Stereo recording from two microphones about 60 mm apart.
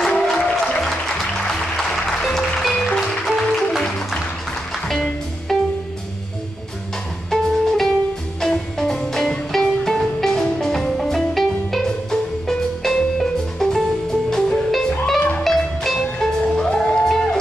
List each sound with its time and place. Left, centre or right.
0.1 s music: centre
5.5 s music: centre
7.2 s music: centre